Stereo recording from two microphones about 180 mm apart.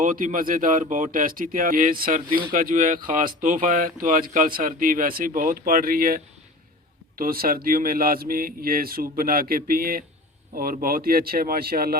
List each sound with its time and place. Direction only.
0.0 s speech: 50° right (ahead or behind)